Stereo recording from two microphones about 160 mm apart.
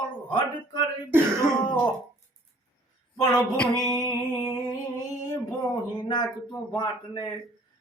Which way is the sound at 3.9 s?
25° left (ahead or behind).